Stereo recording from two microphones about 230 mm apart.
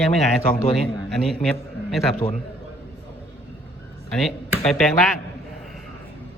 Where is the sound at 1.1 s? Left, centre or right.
Centre.